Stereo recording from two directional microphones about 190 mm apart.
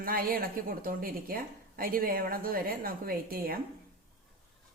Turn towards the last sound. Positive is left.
turn(degrees=-50)  # may be behind; listen again after turning